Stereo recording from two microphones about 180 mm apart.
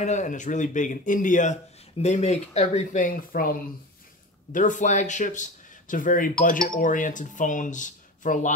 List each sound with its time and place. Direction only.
0.0 s speech: 40° left (ahead or behind)